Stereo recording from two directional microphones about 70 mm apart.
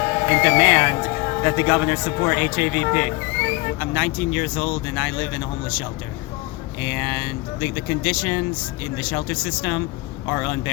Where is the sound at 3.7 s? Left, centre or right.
Centre.